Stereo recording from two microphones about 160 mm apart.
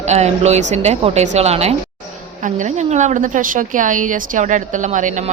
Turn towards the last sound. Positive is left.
turn(degrees=-50)  # may be behind; listen again after turning